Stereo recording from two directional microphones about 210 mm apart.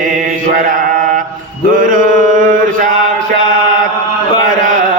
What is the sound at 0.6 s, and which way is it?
Mantra, 40° right (ahead or behind).